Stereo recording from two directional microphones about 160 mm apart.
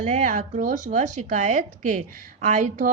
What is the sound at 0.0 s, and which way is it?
Speech, 45° right (ahead or behind).